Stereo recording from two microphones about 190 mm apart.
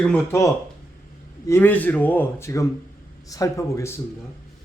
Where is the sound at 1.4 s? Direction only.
10° left (ahead or behind).